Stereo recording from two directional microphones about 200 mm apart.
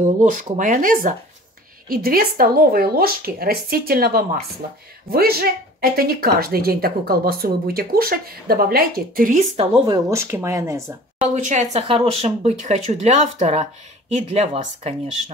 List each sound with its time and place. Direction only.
0.0 s a woman's voice: 40° right (ahead or behind)
9.6 s speech: 20° right (ahead or behind)
11.3 s speech: 35° right (ahead or behind)